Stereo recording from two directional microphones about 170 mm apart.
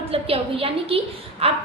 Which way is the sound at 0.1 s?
35° right (ahead or behind).